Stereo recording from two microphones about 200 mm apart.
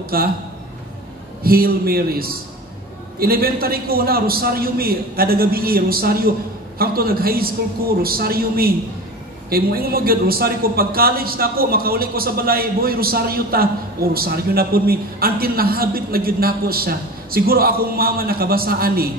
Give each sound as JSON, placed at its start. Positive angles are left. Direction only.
{"t": 0.1, "sound": "a man's voice", "side_deg": -50}
{"t": 1.4, "sound": "a man's voice", "side_deg": -50}